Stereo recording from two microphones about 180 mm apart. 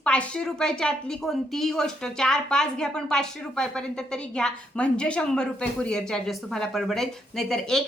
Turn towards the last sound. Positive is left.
turn(degrees=5)  # may be behind; listen again after turning